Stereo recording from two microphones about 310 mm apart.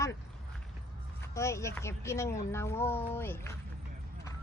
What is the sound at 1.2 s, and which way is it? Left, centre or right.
Speech, centre.